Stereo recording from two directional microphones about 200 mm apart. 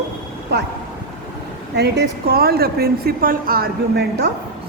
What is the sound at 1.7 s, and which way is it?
Speech, 55° right (ahead or behind).